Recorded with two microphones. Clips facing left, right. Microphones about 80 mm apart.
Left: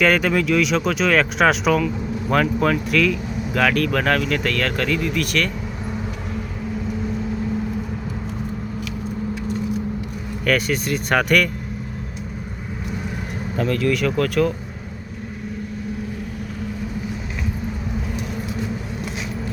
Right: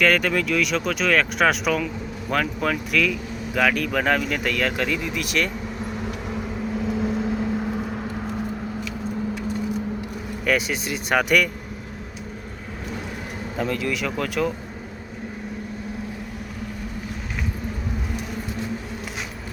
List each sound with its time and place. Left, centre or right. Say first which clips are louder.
0.0 s speech: left 2 dB; centre
10.4 s speech: left 3 dB; centre
13.6 s speech: left 5 dB; centre